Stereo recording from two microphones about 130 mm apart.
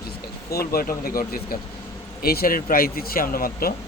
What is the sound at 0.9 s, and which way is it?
Speech, 90° left.